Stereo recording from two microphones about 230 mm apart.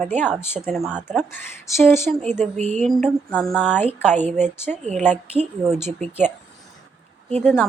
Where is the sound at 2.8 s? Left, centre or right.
Centre.